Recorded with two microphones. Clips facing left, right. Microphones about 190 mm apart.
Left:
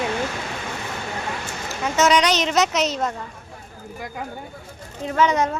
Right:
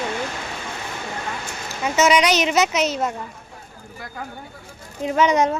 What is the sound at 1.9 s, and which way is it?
A woman's voice, 5° right (ahead or behind).